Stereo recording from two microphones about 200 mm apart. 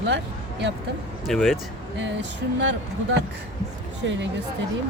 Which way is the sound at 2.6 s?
60° right (ahead or behind).